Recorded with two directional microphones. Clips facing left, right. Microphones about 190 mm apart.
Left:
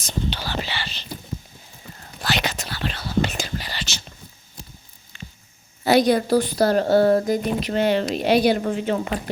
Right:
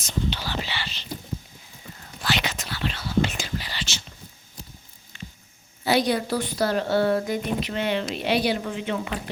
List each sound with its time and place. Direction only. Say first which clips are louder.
0.0 s whispering: left 1 dB; 35° left (ahead or behind)
2.2 s whispering: left 2 dB; 40° left (ahead or behind)
5.8 s a woman's voice: left 5 dB; 45° left (ahead or behind)